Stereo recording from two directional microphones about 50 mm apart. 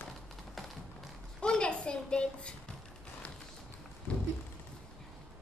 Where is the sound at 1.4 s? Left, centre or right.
Centre.